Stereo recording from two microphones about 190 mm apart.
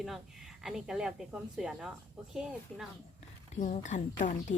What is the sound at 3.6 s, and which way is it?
Speech, 40° left (ahead or behind).